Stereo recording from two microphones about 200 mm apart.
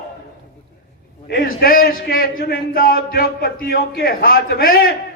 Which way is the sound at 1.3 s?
50° left (ahead or behind).